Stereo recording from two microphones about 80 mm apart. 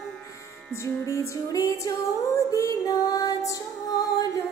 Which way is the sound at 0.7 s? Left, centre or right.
Left.